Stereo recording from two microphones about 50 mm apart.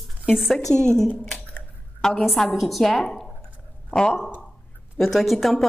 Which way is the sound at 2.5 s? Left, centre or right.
Centre.